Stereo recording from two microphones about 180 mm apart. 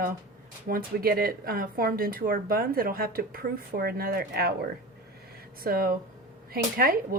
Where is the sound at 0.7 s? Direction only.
50° right (ahead or behind).